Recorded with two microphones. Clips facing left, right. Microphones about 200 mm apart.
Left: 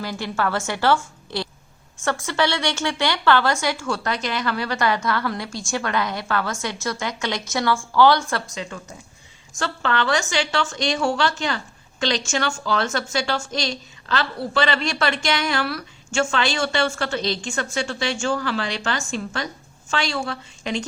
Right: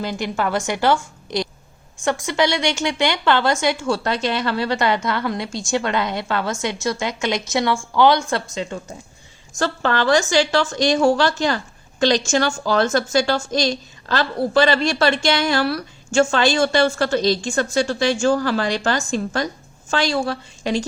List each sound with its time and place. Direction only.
0.0 s a woman's voice: 20° right (ahead or behind); by 20.8 s 35° right (ahead or behind)